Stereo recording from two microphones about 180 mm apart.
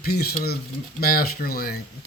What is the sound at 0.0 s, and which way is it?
Speech, 60° left (ahead or behind).